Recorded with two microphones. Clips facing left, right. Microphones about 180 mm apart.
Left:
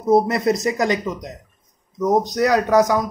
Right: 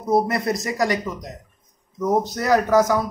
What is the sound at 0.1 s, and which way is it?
A man's voice, 20° left (ahead or behind).